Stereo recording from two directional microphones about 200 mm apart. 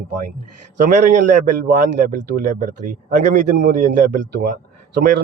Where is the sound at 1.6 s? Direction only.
45° right (ahead or behind).